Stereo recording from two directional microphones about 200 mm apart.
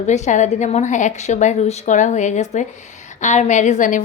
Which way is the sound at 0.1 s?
35° left (ahead or behind).